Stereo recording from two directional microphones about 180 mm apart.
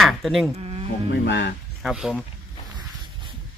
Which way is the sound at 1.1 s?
75° left (ahead or behind).